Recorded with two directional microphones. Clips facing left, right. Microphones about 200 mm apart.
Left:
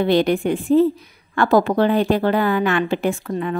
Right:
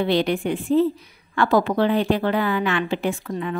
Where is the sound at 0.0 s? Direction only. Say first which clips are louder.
Left 4 dB; 45° left (ahead or behind).